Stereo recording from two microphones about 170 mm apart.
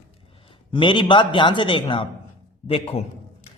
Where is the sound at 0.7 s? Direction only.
30° left (ahead or behind).